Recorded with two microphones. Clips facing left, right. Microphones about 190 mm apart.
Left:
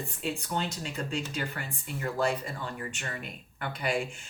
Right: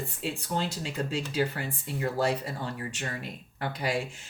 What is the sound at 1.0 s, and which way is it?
Speech, 35° right (ahead or behind).